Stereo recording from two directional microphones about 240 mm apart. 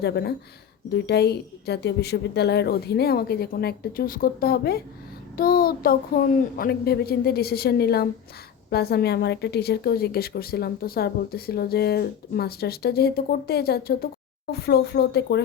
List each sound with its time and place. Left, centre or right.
0.0 s a woman's voice: left